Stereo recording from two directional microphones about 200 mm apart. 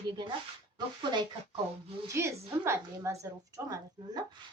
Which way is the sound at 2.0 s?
15° right (ahead or behind).